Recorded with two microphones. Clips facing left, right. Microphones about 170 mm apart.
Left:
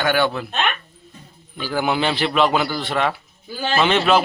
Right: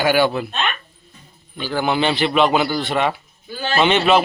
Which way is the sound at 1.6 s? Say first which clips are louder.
Right 1 dB; 10° left (ahead or behind).